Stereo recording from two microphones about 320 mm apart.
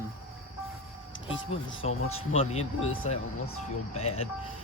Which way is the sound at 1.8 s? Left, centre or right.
Centre.